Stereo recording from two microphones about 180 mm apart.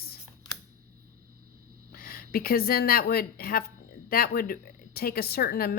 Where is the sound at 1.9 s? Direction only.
55° left (ahead or behind).